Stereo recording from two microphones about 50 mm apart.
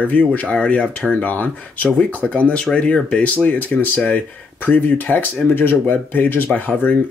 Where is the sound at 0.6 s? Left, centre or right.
Centre.